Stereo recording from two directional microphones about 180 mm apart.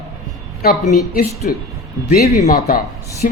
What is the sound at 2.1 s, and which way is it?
Speech, 50° left (ahead or behind).